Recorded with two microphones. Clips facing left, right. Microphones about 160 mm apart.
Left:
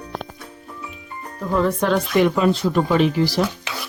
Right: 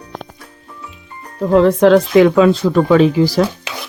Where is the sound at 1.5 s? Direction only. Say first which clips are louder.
Right 10 dB; 85° right.